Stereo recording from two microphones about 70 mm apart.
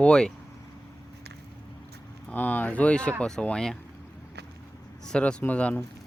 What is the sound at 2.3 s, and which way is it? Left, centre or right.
Speech, left.